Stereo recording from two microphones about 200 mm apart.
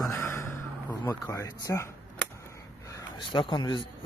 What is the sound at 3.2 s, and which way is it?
Speech, 25° left (ahead or behind).